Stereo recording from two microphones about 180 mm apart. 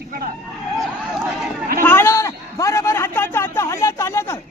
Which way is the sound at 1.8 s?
10° left (ahead or behind).